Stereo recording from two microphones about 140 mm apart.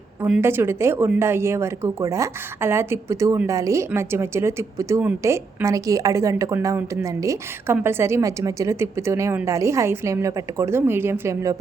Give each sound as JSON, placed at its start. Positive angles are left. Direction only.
{"t": 0.2, "sound": "a woman's voice", "side_deg": -5}
{"t": 0.4, "sound": "a woman's voice", "side_deg": -15}